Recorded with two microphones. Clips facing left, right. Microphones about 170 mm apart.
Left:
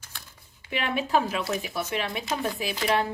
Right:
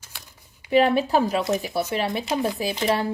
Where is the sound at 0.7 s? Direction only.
40° right (ahead or behind).